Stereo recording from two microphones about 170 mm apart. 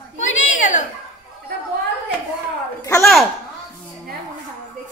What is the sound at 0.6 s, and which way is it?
Speech, 50° left (ahead or behind).